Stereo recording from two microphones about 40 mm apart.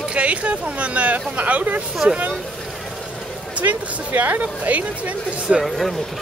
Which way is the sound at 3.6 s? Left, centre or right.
Right.